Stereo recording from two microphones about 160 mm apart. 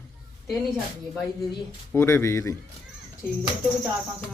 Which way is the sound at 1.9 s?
15° left (ahead or behind).